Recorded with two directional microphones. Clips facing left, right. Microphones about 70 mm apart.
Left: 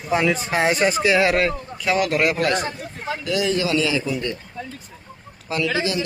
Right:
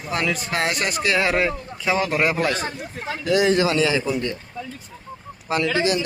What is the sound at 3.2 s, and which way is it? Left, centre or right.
A man's voice, right.